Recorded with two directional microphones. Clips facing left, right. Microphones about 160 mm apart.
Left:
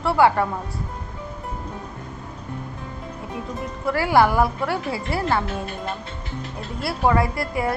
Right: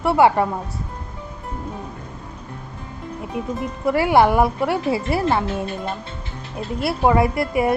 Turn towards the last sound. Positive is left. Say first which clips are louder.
# right 5 dB
turn(degrees=-20)  # may be behind; listen again after turning